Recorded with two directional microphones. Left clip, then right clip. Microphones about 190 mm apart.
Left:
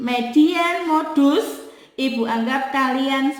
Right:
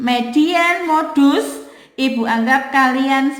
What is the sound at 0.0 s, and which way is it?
A woman's voice, 45° right (ahead or behind).